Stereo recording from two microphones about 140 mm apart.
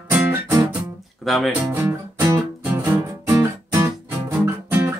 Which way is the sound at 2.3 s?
20° right (ahead or behind).